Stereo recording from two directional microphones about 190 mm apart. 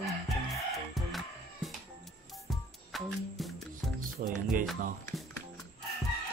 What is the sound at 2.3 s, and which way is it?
Music, centre (ahead or behind).